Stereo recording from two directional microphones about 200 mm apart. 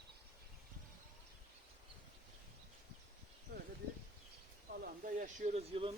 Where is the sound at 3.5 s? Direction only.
50° right (ahead or behind).